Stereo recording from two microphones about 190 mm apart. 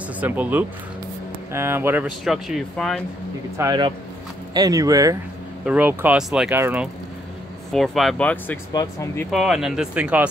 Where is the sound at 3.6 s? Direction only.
20° right (ahead or behind).